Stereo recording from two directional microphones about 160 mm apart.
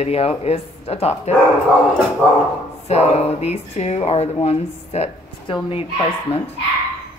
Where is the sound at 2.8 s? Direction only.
40° left (ahead or behind).